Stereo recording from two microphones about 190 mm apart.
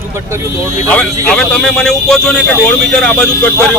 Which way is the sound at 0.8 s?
5° left (ahead or behind).